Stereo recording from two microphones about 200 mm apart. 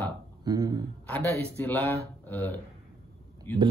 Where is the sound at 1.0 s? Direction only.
10° left (ahead or behind).